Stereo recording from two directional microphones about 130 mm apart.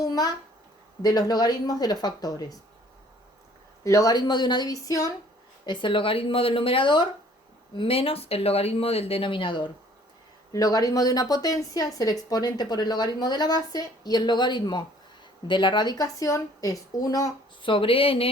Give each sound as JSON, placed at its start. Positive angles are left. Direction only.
{"t": 0.0, "sound": "a sound", "side_deg": 30}
{"t": 1.0, "sound": "speech", "side_deg": 30}
{"t": 3.8, "sound": "a woman's voice", "side_deg": 25}
{"t": 5.6, "sound": "speech", "side_deg": 40}
{"t": 10.5, "sound": "a woman's voice", "side_deg": 25}
{"t": 17.6, "sound": "speech", "side_deg": 40}